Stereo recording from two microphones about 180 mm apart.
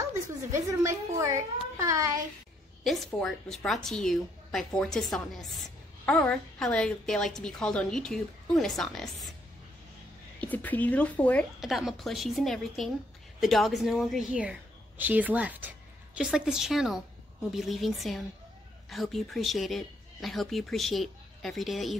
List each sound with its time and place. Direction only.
0.7 s a woman's voice: 15° right (ahead or behind)
2.8 s a woman's voice: centre (ahead or behind)
10.4 s a woman's voice: 10° left (ahead or behind)